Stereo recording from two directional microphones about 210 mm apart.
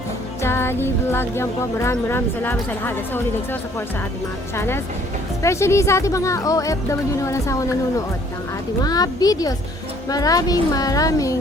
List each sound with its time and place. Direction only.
0.4 s speech: 10° left (ahead or behind)